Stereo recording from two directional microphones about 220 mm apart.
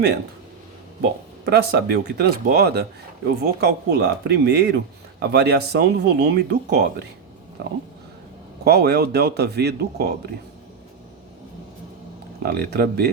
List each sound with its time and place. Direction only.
1.5 s speech: 50° right (ahead or behind)
8.6 s speech: 45° right (ahead or behind)
12.4 s speech: 45° right (ahead or behind)